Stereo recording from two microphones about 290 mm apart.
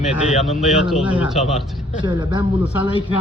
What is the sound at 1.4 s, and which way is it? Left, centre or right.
Speech, left.